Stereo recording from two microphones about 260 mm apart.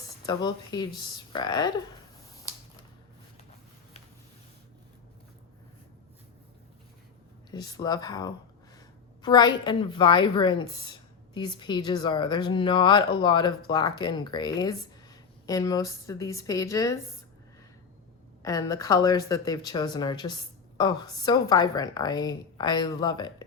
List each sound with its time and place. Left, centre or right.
0.3 s speech: centre
7.5 s speech: centre
18.4 s speech: centre